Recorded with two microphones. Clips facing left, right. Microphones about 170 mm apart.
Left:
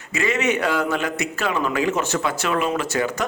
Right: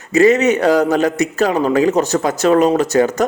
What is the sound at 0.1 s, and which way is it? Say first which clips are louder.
Speech: right 10 dB; 40° right (ahead or behind).